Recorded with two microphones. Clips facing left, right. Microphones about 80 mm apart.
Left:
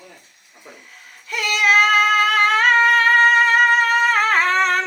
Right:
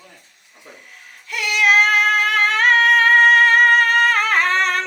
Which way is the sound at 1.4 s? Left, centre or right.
Left.